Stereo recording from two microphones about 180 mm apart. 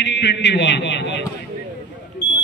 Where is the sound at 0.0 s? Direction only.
75° left (ahead or behind).